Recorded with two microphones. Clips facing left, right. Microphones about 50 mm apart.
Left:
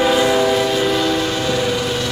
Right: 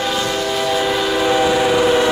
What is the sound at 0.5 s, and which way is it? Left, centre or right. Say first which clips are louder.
Train: left 1 dB; centre.